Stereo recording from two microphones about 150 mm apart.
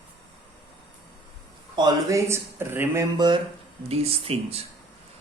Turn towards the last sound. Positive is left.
turn(degrees=-40)  # may be behind; listen again after turning